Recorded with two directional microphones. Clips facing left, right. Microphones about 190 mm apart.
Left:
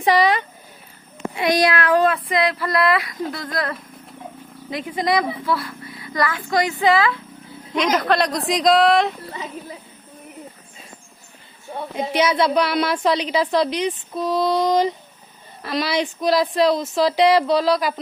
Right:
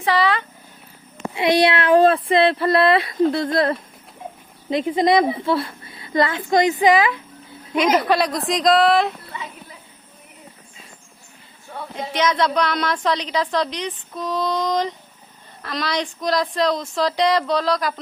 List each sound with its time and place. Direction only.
0.0 s speech: 15° left (ahead or behind)
1.4 s a woman's voice: 30° right (ahead or behind); by 9.1 s centre (ahead or behind)
11.7 s a sound: 20° left (ahead or behind)
12.1 s speech: 10° left (ahead or behind)